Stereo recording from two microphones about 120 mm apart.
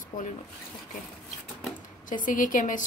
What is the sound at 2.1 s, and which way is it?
Speech, 90° left.